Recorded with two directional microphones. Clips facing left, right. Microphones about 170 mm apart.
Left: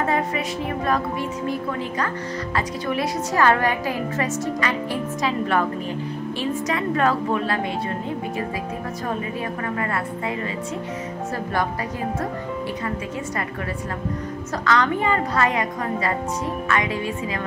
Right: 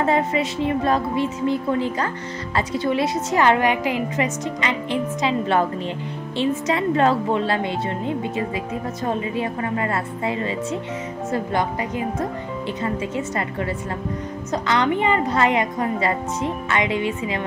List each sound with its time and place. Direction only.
0.0 s a woman's voice: 25° right (ahead or behind)
9.0 s a woman's voice: 25° right (ahead or behind)
14.5 s a woman's voice: 20° right (ahead or behind)